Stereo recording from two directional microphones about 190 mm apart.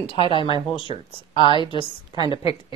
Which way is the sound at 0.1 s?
25° left (ahead or behind).